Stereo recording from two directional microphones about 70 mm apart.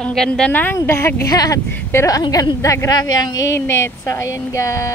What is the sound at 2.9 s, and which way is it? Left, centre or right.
Speech, left.